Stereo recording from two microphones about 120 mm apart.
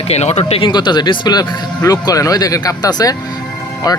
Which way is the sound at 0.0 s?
65° left (ahead or behind).